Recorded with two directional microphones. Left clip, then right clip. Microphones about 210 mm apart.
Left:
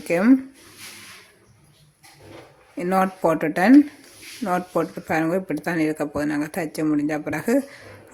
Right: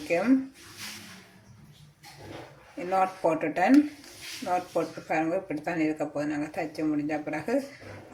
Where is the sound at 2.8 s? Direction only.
45° left (ahead or behind).